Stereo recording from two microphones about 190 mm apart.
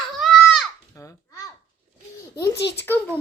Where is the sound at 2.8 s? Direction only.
10° left (ahead or behind).